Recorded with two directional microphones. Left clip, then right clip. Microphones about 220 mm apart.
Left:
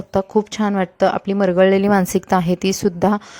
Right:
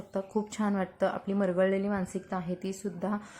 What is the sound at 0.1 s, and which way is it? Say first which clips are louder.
Speech: left 15 dB; 35° left (ahead or behind).